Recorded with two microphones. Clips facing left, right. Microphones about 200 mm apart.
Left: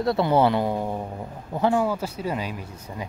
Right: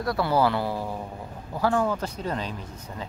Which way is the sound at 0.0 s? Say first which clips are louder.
Left 3 dB; 25° left (ahead or behind).